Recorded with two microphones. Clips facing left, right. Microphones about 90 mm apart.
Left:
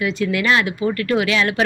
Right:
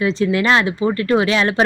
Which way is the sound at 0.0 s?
30° right (ahead or behind).